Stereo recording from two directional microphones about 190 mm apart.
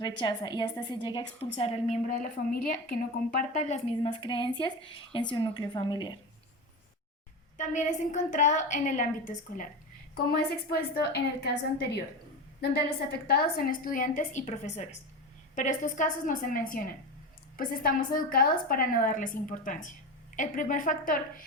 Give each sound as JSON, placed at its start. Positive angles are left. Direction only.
{"t": 0.0, "sound": "a woman's voice", "side_deg": 25}
{"t": 7.5, "sound": "a woman's voice", "side_deg": 40}
{"t": 10.7, "sound": "a woman's voice", "side_deg": 55}
{"t": 12.7, "sound": "a woman's voice", "side_deg": 55}